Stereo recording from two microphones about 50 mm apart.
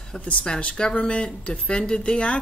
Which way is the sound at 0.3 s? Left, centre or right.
Left.